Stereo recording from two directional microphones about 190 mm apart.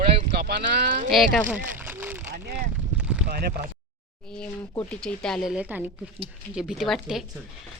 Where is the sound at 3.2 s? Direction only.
55° right (ahead or behind).